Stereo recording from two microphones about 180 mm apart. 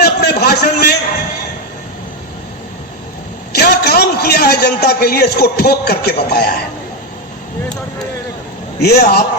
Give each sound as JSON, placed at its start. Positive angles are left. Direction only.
{"t": 0.0, "sound": "a sound", "side_deg": 60}
{"t": 3.5, "sound": "a man's voice", "side_deg": 60}
{"t": 8.8, "sound": "a man's voice", "side_deg": 65}